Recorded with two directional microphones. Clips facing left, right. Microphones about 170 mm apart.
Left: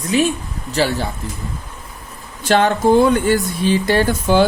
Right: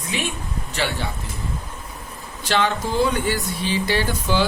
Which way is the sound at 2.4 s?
50° left (ahead or behind).